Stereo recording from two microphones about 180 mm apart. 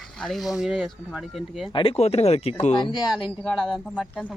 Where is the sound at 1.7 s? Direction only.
30° left (ahead or behind).